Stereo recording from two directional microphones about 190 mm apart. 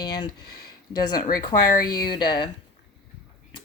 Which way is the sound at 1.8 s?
20° left (ahead or behind).